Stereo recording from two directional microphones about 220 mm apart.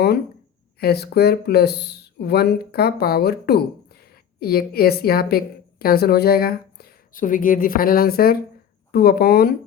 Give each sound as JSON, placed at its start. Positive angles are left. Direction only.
{"t": 0.8, "sound": "speech", "side_deg": 45}